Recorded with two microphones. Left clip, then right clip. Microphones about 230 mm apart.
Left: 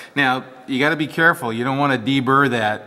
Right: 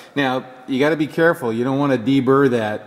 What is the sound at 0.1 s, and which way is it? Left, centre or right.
Speech, centre.